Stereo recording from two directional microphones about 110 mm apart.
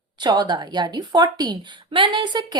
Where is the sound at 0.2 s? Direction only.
40° right (ahead or behind).